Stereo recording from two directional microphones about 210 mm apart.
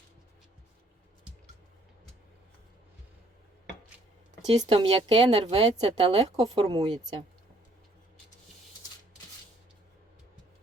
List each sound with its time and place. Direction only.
4.5 s speech: 20° right (ahead or behind)